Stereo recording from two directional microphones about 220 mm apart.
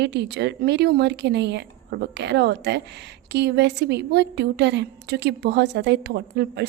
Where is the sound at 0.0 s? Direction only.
50° right (ahead or behind).